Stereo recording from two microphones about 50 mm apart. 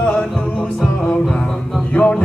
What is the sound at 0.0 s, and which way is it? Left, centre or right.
Music, left.